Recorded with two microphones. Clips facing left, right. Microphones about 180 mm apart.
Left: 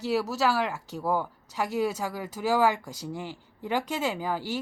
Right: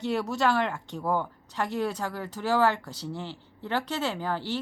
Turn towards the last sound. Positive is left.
turn(degrees=10)  # may be behind; listen again after turning